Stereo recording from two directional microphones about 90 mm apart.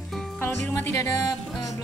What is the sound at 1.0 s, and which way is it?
Music, 40° left (ahead or behind).